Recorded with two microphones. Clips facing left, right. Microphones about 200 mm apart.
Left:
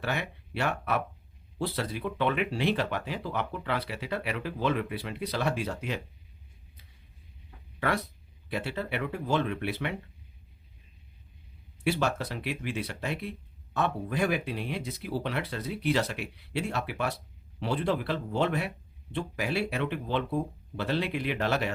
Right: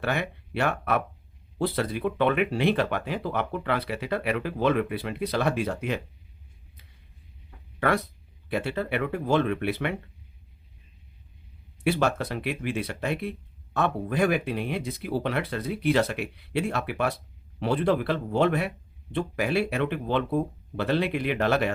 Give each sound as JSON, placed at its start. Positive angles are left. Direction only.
{"t": 0.0, "sound": "speech", "side_deg": -55}
{"t": 8.4, "sound": "speech", "side_deg": -55}
{"t": 11.8, "sound": "speech", "side_deg": -55}